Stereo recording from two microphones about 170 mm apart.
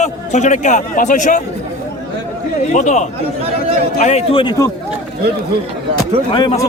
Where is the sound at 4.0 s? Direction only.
40° left (ahead or behind).